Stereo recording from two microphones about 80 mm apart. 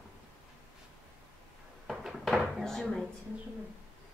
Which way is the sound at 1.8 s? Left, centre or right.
Centre.